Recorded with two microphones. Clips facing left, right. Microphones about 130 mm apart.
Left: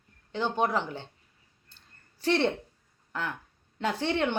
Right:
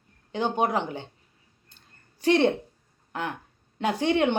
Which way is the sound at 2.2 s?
15° right (ahead or behind).